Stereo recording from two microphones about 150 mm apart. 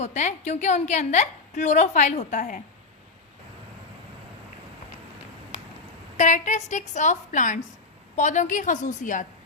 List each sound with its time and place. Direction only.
0.0 s a woman's voice: 50° left (ahead or behind)
6.1 s a woman's voice: 55° left (ahead or behind)